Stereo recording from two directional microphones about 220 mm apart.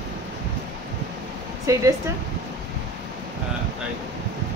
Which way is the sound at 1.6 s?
15° right (ahead or behind).